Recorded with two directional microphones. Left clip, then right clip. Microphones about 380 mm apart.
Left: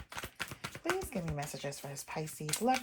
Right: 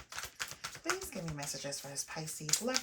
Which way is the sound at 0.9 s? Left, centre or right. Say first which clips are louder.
Left 3 dB; left.